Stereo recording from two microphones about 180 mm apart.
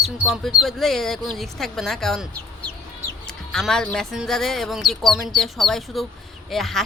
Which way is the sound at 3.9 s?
Centre (ahead or behind).